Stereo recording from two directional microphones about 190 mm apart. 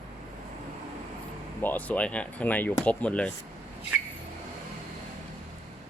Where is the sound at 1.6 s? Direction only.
10° left (ahead or behind).